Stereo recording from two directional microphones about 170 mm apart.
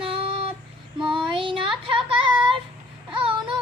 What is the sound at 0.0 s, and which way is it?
Child singing, 30° right (ahead or behind).